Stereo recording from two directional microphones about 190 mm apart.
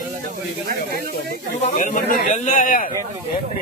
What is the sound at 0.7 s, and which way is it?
Speech, 55° right (ahead or behind).